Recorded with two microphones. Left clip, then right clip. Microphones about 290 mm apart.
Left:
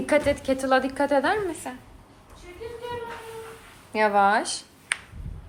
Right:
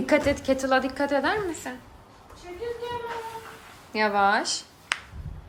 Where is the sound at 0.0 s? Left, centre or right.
Centre.